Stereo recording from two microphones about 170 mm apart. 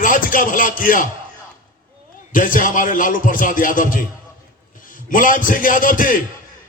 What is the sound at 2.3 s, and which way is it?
A man's voice, 55° left (ahead or behind).